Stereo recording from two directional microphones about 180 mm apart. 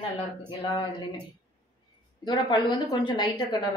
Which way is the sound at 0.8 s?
25° left (ahead or behind).